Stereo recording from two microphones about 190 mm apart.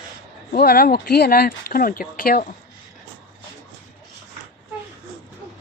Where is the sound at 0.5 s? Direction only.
55° left (ahead or behind).